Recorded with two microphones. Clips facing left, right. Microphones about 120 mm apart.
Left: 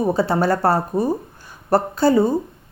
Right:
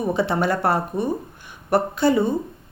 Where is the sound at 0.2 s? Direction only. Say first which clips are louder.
Left 3 dB; 35° left (ahead or behind).